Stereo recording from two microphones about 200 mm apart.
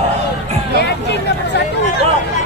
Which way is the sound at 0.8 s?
60° left (ahead or behind).